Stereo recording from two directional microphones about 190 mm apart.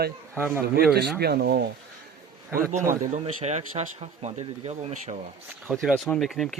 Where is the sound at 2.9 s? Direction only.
35° right (ahead or behind).